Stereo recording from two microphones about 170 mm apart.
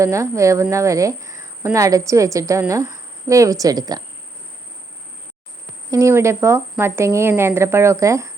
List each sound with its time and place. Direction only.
0.0 s speech: 15° right (ahead or behind)
5.9 s a woman's voice: 15° right (ahead or behind)